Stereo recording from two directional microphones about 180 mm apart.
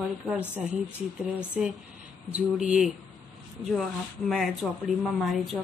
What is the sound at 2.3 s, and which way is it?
Speech, 5° right (ahead or behind).